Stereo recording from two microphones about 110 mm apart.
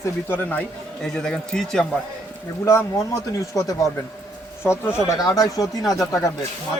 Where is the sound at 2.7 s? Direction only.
30° left (ahead or behind).